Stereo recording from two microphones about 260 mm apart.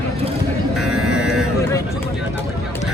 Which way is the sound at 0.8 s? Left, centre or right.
Centre.